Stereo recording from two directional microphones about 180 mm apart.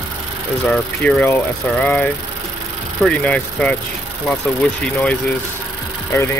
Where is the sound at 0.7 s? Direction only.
Centre (ahead or behind).